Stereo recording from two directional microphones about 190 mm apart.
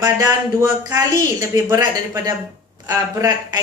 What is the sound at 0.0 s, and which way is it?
A woman's voice, 20° right (ahead or behind).